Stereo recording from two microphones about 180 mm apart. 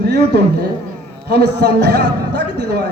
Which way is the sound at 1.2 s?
65° right (ahead or behind).